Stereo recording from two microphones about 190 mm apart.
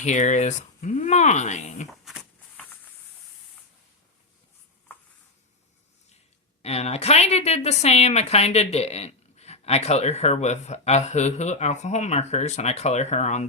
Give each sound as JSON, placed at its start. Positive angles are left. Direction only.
{"t": 0.0, "sound": "a woman's voice", "side_deg": 40}
{"t": 1.9, "sound": "a sound", "side_deg": 0}
{"t": 6.6, "sound": "a woman's voice", "side_deg": 35}